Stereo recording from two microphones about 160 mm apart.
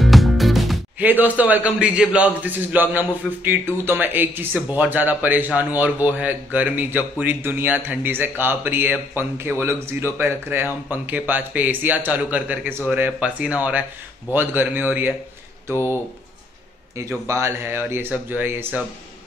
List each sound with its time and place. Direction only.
0.0 s music: centre (ahead or behind)
0.9 s a man's voice: 10° right (ahead or behind)